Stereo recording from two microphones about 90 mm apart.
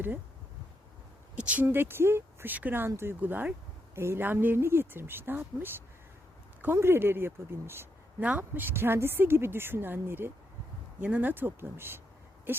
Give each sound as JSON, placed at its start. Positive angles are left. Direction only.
{"t": 1.4, "sound": "a woman's voice", "side_deg": -15}